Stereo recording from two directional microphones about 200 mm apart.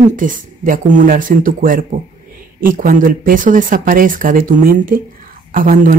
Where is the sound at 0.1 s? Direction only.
40° right (ahead or behind).